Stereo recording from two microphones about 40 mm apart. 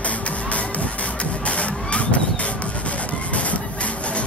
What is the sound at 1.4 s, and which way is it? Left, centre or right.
Music, left.